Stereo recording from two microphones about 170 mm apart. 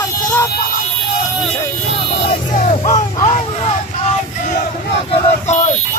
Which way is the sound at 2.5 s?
45° left (ahead or behind).